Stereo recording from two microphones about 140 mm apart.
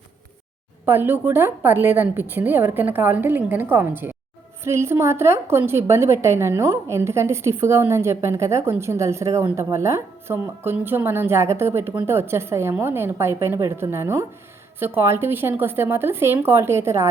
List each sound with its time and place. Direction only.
0.9 s a woman's voice: 15° right (ahead or behind)